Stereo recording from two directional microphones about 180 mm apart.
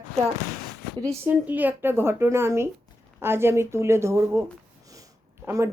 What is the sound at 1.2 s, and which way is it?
A woman's voice, 10° right (ahead or behind).